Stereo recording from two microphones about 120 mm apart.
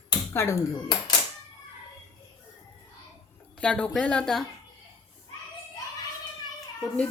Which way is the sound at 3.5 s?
10° left (ahead or behind).